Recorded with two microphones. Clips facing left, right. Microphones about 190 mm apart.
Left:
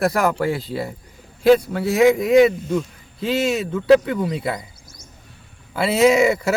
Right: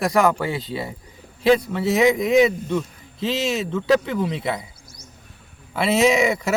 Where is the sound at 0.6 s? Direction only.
Centre (ahead or behind).